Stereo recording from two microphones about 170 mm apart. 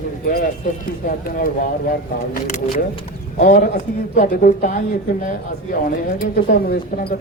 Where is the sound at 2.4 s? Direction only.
45° left (ahead or behind).